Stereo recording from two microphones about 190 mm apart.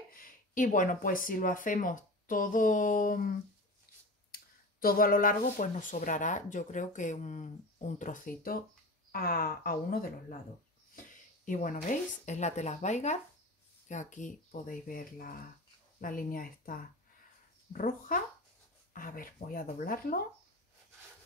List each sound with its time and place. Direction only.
0.1 s speech: 45° left (ahead or behind)